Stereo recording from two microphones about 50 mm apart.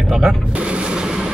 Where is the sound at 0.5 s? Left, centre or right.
Right.